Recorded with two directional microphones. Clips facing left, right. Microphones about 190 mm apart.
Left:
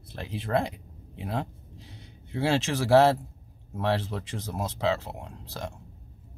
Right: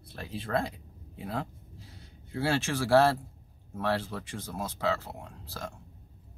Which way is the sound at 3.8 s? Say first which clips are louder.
Left 3 dB; 20° left (ahead or behind).